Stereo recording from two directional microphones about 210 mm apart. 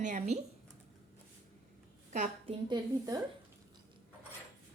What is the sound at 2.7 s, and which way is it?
Speech, 20° right (ahead or behind).